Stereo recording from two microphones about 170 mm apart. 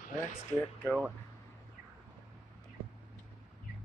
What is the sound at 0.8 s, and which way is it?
Speech, centre (ahead or behind).